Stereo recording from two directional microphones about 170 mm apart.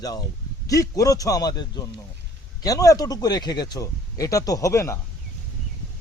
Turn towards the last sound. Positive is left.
turn(degrees=15)  # may be behind; listen again after turning